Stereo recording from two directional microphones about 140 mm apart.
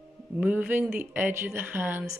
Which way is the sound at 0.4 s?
15° right (ahead or behind).